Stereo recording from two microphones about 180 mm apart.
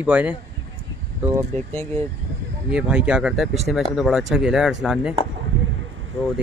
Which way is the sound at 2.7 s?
5° right (ahead or behind).